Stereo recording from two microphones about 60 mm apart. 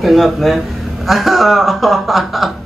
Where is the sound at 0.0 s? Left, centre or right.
Centre.